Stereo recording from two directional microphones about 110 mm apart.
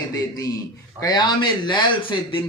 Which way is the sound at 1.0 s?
40° left (ahead or behind).